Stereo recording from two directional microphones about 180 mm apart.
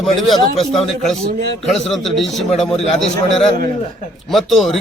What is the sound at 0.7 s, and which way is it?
A man's voice, centre (ahead or behind).